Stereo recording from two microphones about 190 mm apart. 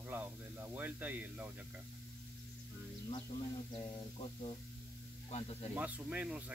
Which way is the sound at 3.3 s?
25° left (ahead or behind).